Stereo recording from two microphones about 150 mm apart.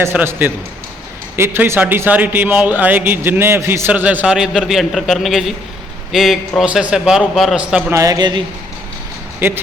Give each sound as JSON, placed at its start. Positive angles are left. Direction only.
{"t": 0.0, "sound": "a man's voice", "side_deg": -15}
{"t": 7.9, "sound": "a man's voice", "side_deg": -20}